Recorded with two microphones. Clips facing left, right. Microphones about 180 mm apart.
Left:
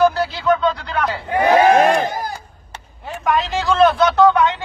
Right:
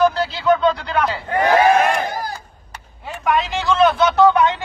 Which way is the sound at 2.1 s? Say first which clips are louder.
Left 1 dB; 20° left (ahead or behind).